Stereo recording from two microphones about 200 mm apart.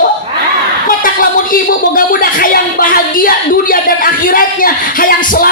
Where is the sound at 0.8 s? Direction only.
45° left (ahead or behind).